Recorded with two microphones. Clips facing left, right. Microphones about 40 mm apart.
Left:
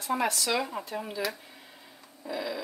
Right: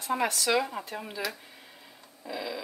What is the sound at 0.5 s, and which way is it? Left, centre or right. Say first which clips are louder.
Speech: right 2 dB; centre.